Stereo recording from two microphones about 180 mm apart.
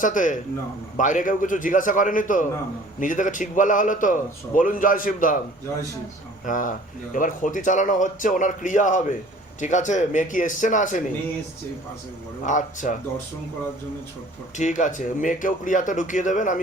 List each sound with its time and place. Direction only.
0.0 s speech: 45° left (ahead or behind)
6.4 s speech: 45° left (ahead or behind)
12.5 s speech: 45° left (ahead or behind)
14.5 s speech: 45° left (ahead or behind)